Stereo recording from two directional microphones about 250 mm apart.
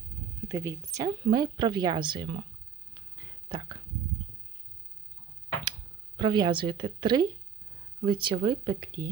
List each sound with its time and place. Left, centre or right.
0.4 s a woman's voice: centre
3.5 s a woman's voice: centre
6.1 s a woman's voice: centre